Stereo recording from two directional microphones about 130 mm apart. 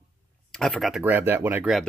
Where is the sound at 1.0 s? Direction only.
15° right (ahead or behind).